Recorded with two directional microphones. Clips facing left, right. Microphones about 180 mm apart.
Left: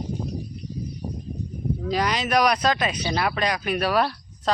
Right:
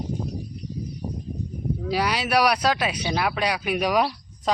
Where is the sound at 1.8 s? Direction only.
10° right (ahead or behind).